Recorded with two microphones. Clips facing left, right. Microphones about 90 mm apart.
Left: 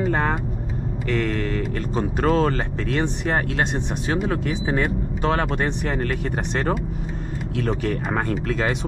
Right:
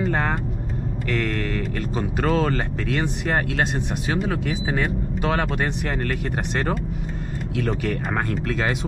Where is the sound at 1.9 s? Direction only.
Centre (ahead or behind).